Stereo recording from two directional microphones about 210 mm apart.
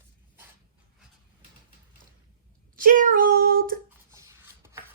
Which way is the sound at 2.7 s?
40° right (ahead or behind).